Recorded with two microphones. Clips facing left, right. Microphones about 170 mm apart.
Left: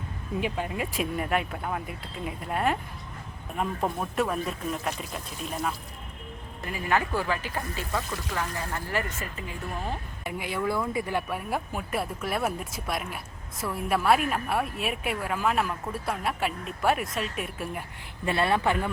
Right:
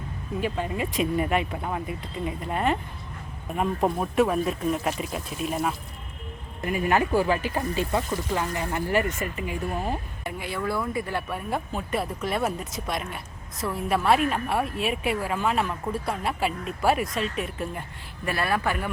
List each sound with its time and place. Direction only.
0.4 s speech: 10° left (ahead or behind)
3.8 s speech: 20° right (ahead or behind)
4.1 s speech: centre (ahead or behind)
6.8 s speech: 15° right (ahead or behind)
10.2 s speech: 15° left (ahead or behind)
18.3 s speech: 25° left (ahead or behind)